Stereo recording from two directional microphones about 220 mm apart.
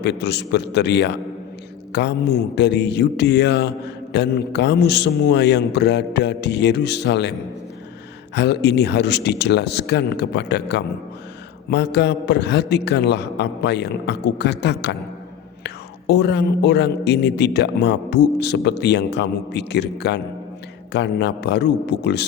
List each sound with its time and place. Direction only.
0.0 s a man's voice: 50° left (ahead or behind)
8.4 s a man's voice: 50° left (ahead or behind)